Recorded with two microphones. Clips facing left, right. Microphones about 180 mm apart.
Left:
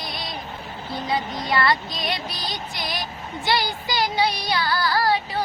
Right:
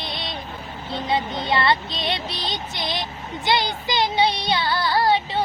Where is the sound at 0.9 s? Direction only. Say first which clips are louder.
Right 2 dB; 25° right (ahead or behind).